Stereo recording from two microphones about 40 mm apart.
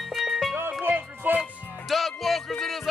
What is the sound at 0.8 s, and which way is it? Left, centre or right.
Music, right.